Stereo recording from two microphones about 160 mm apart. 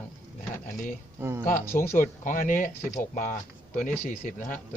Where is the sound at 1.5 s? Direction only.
15° left (ahead or behind).